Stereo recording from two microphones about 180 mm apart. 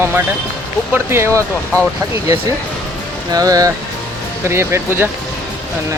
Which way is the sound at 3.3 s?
20° right (ahead or behind).